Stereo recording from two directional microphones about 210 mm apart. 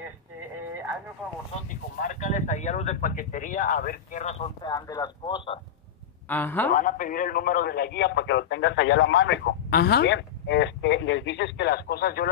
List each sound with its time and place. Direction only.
1.5 s speech: 40° left (ahead or behind)
4.6 s speech: 20° left (ahead or behind)
6.2 s speech: 10° left (ahead or behind)
6.7 s a man's voice: 40° left (ahead or behind)